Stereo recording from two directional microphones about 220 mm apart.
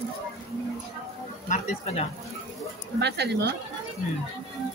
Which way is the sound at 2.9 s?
50° right (ahead or behind).